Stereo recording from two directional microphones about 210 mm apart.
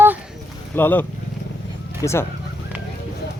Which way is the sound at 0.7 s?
10° left (ahead or behind).